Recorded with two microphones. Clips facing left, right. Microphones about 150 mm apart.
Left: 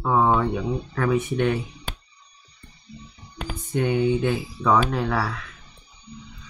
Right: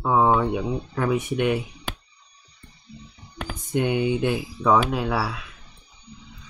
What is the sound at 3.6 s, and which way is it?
Speech, 15° right (ahead or behind).